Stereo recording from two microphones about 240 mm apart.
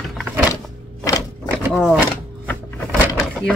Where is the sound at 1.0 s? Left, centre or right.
Centre.